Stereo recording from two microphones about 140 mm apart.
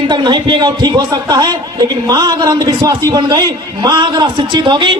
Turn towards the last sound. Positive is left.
turn(degrees=-35)  # may be behind; listen again after turning